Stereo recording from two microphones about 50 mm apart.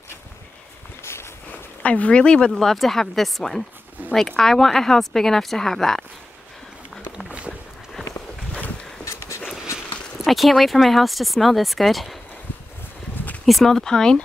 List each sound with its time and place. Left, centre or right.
1.8 s speech: left
2.6 s speech: centre
4.0 s a sound: right
4.4 s a woman's voice: centre
7.2 s boat: right
9.0 s a sound: left
10.2 s speech: centre
13.5 s a woman's voice: centre